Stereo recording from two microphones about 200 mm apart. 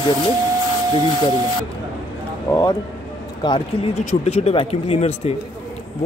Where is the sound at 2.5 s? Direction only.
20° left (ahead or behind).